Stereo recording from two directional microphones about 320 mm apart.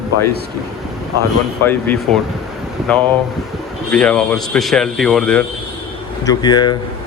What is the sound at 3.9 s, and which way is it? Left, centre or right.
Speech, centre.